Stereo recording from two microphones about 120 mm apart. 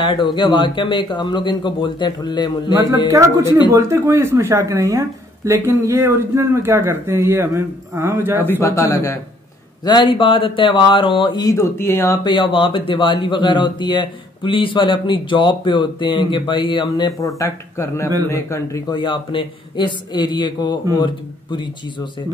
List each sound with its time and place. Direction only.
0.0 s a man's voice: 40° left (ahead or behind)
3.1 s speech: 25° right (ahead or behind)
8.5 s speech: 20° left (ahead or behind)
9.8 s speech: 40° left (ahead or behind)
11.5 s speech: 20° left (ahead or behind)
12.2 s a man's voice: 40° left (ahead or behind); by 18.9 s 25° left (ahead or behind)
18.9 s a man's voice: 40° left (ahead or behind)